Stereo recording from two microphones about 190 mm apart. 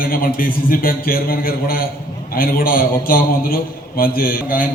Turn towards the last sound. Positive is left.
turn(degrees=45)  # may be behind; listen again after turning